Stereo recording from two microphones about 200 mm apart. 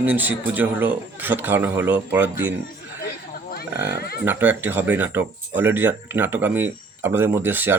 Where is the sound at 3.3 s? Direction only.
50° left (ahead or behind).